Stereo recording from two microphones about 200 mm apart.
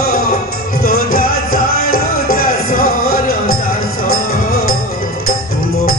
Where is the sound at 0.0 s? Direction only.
45° left (ahead or behind).